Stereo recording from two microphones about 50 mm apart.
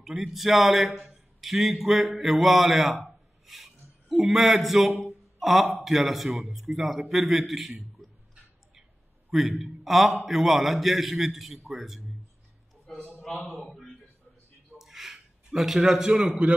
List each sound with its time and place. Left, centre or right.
0.0 s a man's voice: centre
1.0 s mantra: centre
5.0 s a sound: centre
5.9 s a man's voice: centre
9.3 s a man's voice: centre
13.2 s a man's voice: centre
14.8 s a sound: centre
16.2 s a man's voice: right